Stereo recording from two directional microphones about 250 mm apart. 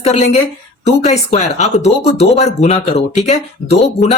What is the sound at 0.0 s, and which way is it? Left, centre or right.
Speech, left.